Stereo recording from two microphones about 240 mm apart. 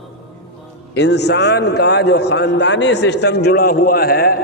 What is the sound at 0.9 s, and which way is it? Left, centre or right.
A man's voice, left.